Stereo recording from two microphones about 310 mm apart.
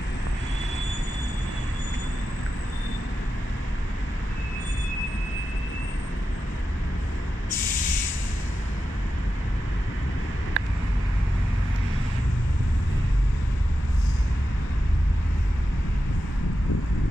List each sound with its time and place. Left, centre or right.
10.6 s vehicle: right